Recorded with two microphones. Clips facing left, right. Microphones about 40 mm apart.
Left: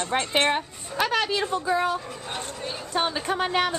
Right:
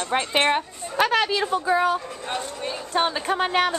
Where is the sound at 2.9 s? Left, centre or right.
Centre.